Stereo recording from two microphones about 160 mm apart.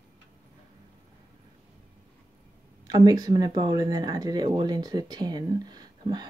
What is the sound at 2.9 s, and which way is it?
Speech, 25° right (ahead or behind).